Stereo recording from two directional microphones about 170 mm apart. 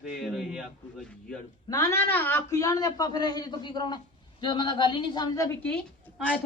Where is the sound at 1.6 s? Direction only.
20° left (ahead or behind).